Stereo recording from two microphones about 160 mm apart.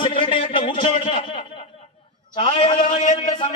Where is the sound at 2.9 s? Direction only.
45° left (ahead or behind).